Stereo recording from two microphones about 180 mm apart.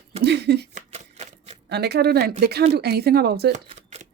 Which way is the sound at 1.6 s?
65° right (ahead or behind).